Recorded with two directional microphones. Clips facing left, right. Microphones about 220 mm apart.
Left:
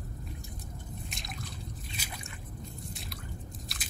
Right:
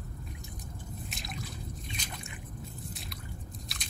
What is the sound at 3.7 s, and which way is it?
Biting, centre (ahead or behind).